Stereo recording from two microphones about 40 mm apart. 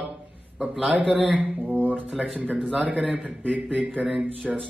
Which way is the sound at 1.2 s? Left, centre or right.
Right.